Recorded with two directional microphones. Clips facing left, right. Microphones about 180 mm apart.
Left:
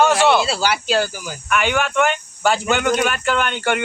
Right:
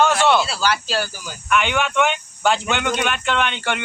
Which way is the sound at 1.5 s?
5° left (ahead or behind).